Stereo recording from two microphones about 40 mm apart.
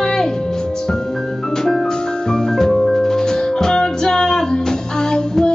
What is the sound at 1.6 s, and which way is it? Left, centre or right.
Music, centre.